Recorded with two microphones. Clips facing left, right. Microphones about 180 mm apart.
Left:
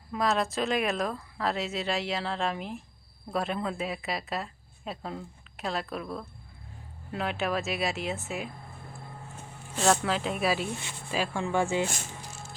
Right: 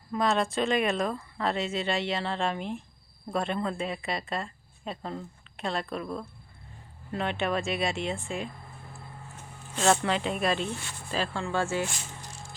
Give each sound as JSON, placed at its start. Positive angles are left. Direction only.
{"t": 0.1, "sound": "speech", "side_deg": 0}
{"t": 9.7, "sound": "speech", "side_deg": 0}